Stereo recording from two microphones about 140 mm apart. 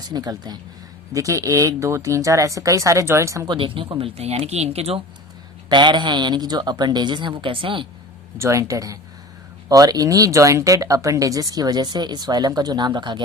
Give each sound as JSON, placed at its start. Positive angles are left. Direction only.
{"t": 0.1, "sound": "speech", "side_deg": -30}
{"t": 4.2, "sound": "speech", "side_deg": -45}
{"t": 5.6, "sound": "a woman's voice", "side_deg": -30}
{"t": 8.4, "sound": "speech", "side_deg": -20}